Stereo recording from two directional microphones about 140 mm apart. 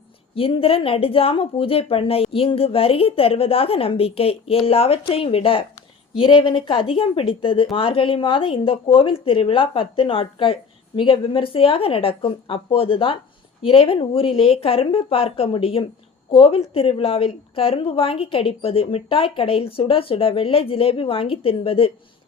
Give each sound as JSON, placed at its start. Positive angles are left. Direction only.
{"t": 0.3, "sound": "speech", "side_deg": 40}